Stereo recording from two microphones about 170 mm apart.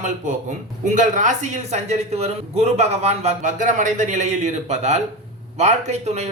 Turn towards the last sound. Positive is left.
turn(degrees=-40)  # may be behind; listen again after turning